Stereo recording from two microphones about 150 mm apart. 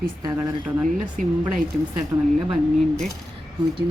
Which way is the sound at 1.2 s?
65° right (ahead or behind).